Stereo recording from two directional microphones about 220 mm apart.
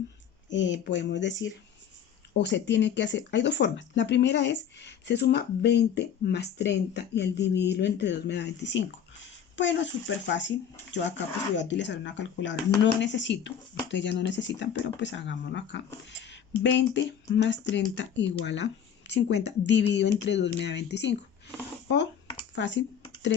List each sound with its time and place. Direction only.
0.5 s speech: 55° left (ahead or behind)
22.5 s speech: 55° left (ahead or behind)